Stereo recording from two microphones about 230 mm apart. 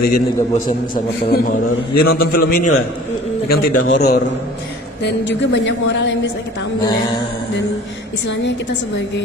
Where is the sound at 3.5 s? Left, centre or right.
Left.